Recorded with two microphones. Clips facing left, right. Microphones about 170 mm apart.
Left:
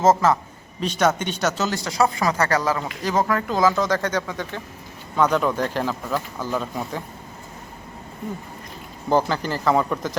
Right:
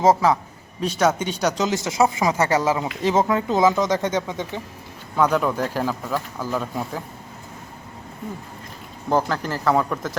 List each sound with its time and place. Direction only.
0.0 s speech: 10° right (ahead or behind)
5.1 s speech: 5° right (ahead or behind)
9.0 s speech: centre (ahead or behind)